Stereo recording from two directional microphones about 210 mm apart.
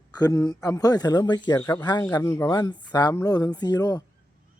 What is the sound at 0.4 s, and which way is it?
Speech, 15° left (ahead or behind).